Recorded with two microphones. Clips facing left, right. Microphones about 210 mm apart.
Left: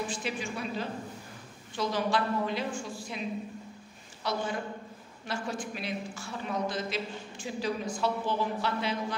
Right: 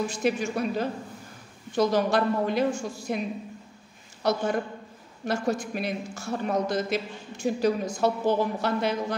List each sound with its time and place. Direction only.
0.1 s speech: 45° right (ahead or behind)
4.2 s a man's voice: 45° right (ahead or behind)